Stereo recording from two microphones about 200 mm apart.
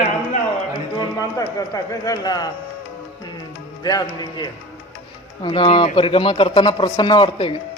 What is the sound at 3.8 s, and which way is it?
Speech, 20° left (ahead or behind).